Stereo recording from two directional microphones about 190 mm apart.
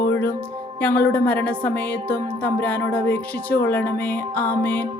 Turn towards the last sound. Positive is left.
turn(degrees=10)  # may be behind; listen again after turning